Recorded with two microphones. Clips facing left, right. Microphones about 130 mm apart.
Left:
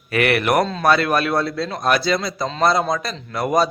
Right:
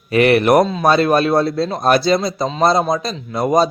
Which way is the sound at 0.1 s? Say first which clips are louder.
Right 6 dB; 25° right (ahead or behind).